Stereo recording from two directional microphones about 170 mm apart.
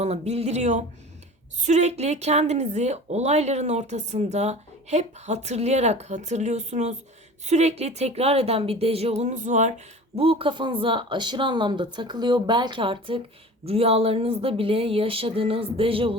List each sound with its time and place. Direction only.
0.0 s speech: 40° right (ahead or behind)